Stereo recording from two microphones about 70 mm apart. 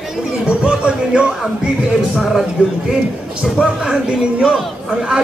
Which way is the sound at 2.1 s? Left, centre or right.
Centre.